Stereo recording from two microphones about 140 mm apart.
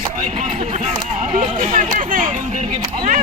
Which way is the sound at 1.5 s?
75° right (ahead or behind).